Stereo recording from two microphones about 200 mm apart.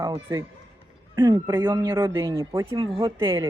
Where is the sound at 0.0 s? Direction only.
15° right (ahead or behind).